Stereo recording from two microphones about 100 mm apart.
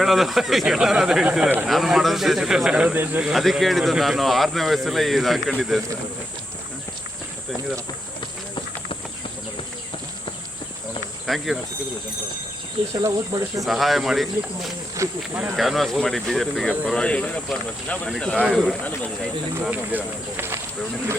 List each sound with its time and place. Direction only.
0.0 s speech: centre (ahead or behind); by 3.2 s 20° right (ahead or behind)
3.2 s speech: centre (ahead or behind)
11.3 s speech: centre (ahead or behind)
12.9 s speech: 40° right (ahead or behind)
13.7 s speech: centre (ahead or behind)
14.9 s speech: 30° right (ahead or behind)
15.5 s speech: centre (ahead or behind)
18.8 s speech: 15° left (ahead or behind)
19.7 s speech: 15° right (ahead or behind)